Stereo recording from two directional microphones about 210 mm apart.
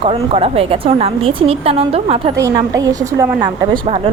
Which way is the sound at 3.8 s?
30° right (ahead or behind).